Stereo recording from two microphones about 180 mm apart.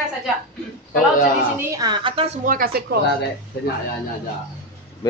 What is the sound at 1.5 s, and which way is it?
Speech, 20° right (ahead or behind).